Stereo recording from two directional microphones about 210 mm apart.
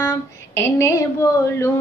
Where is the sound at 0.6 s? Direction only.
15° left (ahead or behind).